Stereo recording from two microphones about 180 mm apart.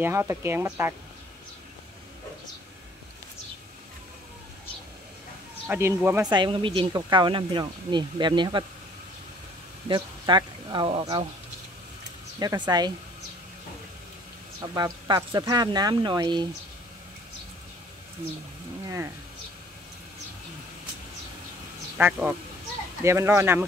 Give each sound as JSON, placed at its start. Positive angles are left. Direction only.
{"t": 0.0, "sound": "speech", "side_deg": -15}
{"t": 5.7, "sound": "speech", "side_deg": -15}
{"t": 6.3, "sound": "speech", "side_deg": -25}
{"t": 9.8, "sound": "speech", "side_deg": -25}
{"t": 12.4, "sound": "speech", "side_deg": -20}
{"t": 14.6, "sound": "speech", "side_deg": -20}
{"t": 21.9, "sound": "speech", "side_deg": -10}